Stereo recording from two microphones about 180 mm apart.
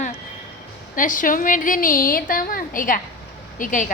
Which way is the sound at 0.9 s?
50° left (ahead or behind).